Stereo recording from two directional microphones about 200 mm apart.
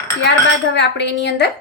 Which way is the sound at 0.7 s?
60° left (ahead or behind).